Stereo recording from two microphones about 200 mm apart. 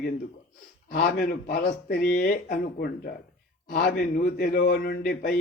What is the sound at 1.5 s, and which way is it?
A man's voice, 50° left (ahead or behind).